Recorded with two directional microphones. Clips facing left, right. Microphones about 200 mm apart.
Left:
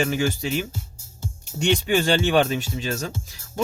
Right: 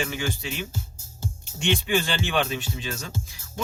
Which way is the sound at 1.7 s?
40° left (ahead or behind).